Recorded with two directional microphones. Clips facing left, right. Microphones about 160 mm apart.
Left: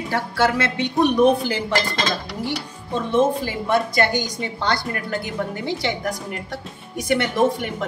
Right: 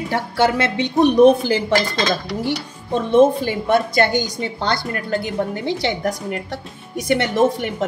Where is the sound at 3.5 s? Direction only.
25° right (ahead or behind).